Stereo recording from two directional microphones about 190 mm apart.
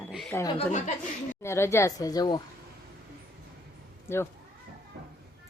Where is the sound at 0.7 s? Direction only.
40° left (ahead or behind).